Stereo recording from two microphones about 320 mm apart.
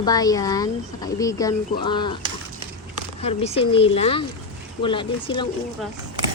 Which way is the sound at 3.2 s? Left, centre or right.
Centre.